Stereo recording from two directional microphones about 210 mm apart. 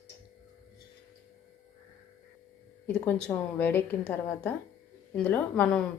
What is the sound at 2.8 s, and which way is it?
A woman's voice, 10° left (ahead or behind).